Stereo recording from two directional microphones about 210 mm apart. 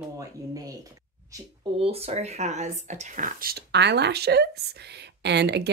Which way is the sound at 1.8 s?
30° right (ahead or behind).